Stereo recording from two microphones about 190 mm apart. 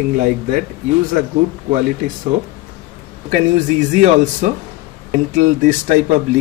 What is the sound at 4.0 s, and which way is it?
Speech, 40° right (ahead or behind).